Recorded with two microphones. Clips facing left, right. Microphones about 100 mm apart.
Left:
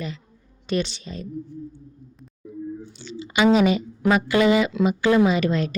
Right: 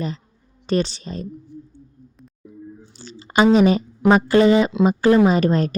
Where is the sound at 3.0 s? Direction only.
40° right (ahead or behind).